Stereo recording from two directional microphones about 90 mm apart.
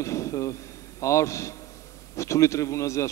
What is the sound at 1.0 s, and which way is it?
A man's voice, 35° left (ahead or behind).